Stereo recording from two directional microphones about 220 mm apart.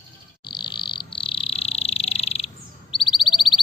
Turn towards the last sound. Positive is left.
turn(degrees=20)  # may be behind; listen again after turning